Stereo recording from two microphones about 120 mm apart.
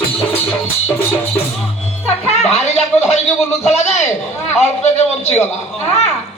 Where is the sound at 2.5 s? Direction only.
65° left (ahead or behind).